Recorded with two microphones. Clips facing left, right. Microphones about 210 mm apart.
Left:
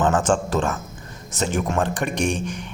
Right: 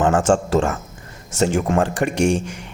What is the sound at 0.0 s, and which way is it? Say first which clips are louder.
A man's voice: right 3 dB; 25° right (ahead or behind).